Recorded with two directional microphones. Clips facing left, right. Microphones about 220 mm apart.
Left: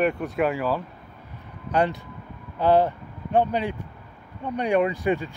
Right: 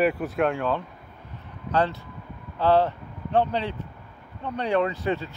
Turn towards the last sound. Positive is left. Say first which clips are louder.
# left 2 dB
turn(degrees=15)  # may be behind; listen again after turning